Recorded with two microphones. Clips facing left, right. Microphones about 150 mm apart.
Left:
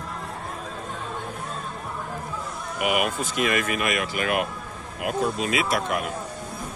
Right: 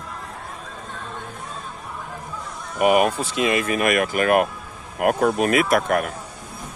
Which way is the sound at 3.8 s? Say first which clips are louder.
Right 6 dB; 50° right (ahead or behind).